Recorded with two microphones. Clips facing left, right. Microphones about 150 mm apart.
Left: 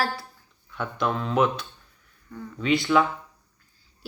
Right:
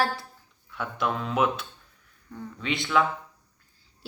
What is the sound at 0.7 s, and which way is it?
Speech, 5° right (ahead or behind).